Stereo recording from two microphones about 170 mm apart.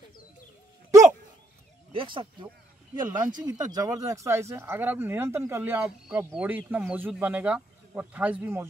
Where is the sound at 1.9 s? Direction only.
30° right (ahead or behind).